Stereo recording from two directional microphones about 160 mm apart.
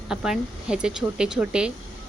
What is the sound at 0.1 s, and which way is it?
A woman's voice, 5° right (ahead or behind).